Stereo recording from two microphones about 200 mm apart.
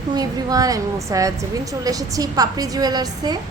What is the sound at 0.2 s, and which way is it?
A woman's voice, 20° right (ahead or behind).